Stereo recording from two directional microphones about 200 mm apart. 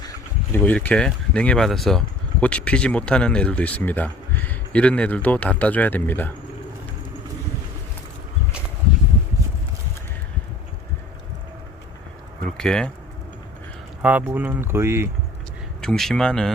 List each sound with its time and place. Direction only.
0.0 s a sound: 15° left (ahead or behind)
0.6 s speech: 5° left (ahead or behind)
12.5 s speech: 5° left (ahead or behind)
14.0 s speech: 10° right (ahead or behind)
15.8 s a man's voice: 5° left (ahead or behind)